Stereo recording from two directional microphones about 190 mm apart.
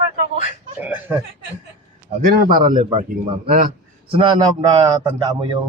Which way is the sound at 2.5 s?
45° right (ahead or behind).